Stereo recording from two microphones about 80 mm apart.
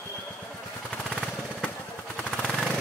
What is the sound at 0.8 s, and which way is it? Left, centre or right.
Vehicle, centre.